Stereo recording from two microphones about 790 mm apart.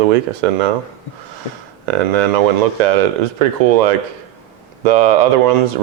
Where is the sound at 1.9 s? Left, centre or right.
Right.